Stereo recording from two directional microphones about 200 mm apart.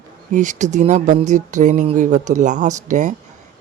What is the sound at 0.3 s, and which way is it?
Speech, 40° right (ahead or behind).